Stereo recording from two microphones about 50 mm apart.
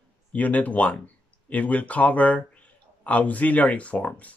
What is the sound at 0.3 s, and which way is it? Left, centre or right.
Speech, left.